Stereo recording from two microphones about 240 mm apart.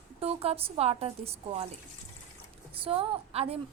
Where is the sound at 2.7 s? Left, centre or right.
Right.